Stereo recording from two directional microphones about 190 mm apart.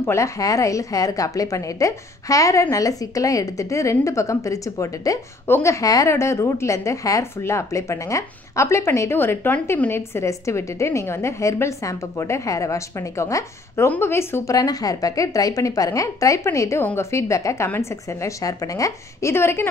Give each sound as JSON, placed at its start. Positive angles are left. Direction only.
{"t": 0.0, "sound": "a woman's voice", "side_deg": 15}